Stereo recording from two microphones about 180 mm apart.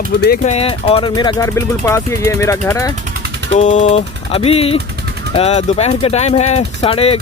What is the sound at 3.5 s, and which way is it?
Speech, 40° left (ahead or behind).